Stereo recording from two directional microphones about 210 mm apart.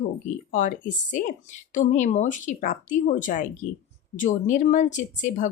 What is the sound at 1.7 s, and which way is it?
Speech, 35° left (ahead or behind).